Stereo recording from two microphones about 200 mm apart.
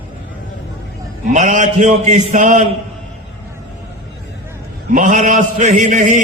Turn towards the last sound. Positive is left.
turn(degrees=-35)  # may be behind; listen again after turning